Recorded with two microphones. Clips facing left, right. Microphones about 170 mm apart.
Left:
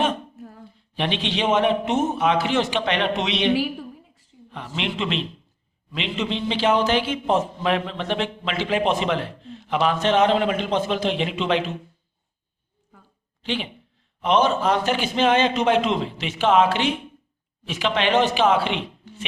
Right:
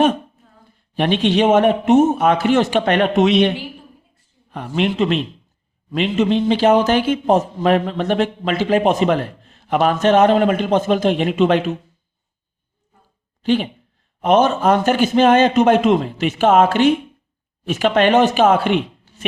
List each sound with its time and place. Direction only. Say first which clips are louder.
0.9 s speech: right 9 dB; 50° right (ahead or behind)
3.5 s a sound: left 7 dB; 90° left
4.5 s speech: right 9 dB; 50° right (ahead or behind)
13.4 s speech: right 10 dB; 45° right (ahead or behind)